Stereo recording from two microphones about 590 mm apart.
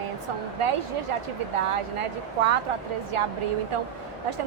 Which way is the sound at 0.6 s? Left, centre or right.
Right.